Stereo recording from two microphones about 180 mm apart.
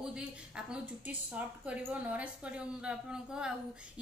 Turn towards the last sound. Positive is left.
turn(degrees=-5)  # may be behind; listen again after turning